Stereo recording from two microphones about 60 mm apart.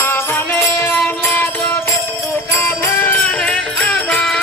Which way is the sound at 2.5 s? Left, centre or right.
Left.